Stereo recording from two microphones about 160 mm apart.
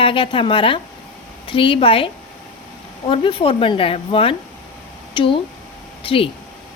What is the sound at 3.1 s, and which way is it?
A woman's voice, 35° left (ahead or behind).